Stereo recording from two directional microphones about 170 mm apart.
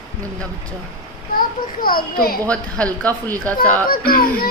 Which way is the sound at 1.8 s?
60° left (ahead or behind).